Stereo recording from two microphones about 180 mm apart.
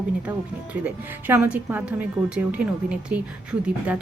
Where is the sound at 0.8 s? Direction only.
5° right (ahead or behind).